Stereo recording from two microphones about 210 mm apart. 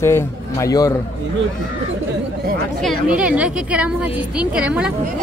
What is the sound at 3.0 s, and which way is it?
A woman's voice, 5° right (ahead or behind).